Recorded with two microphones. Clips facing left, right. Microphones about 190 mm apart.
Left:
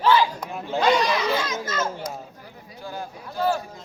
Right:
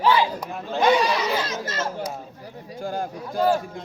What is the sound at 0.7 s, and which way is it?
Speech, 15° right (ahead or behind).